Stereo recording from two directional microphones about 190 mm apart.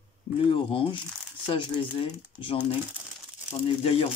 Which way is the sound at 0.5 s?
30° left (ahead or behind).